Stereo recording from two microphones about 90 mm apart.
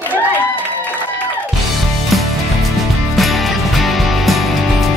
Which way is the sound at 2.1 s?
Centre (ahead or behind).